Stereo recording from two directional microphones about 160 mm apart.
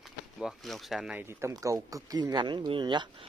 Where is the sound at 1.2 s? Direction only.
20° right (ahead or behind).